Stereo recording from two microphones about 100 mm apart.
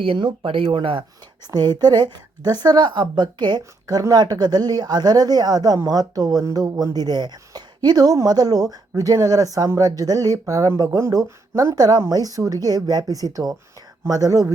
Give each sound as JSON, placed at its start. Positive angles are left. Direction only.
{"t": 0.0, "sound": "speech", "side_deg": -60}
{"t": 1.8, "sound": "a woman's voice", "side_deg": -45}